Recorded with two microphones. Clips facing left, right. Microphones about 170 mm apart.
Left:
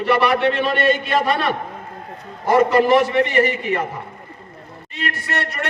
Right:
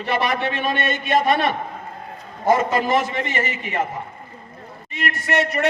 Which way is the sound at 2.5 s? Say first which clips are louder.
Left 5 dB; 65° left (ahead or behind).